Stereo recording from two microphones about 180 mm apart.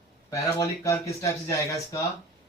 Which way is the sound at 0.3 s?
15° left (ahead or behind).